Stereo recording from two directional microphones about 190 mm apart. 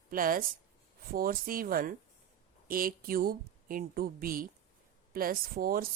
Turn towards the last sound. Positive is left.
turn(degrees=-50)  # may be behind; listen again after turning